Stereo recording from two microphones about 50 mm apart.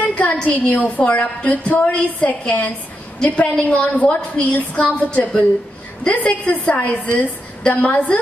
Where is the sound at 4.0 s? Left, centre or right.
Left.